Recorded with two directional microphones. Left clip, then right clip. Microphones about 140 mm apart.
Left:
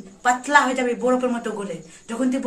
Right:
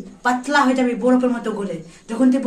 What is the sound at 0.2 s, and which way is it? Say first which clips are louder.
A woman's voice: even; 10° left (ahead or behind).